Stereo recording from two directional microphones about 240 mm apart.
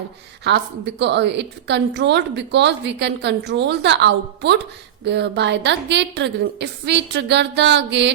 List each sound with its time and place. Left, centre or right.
0.4 s a woman's voice: right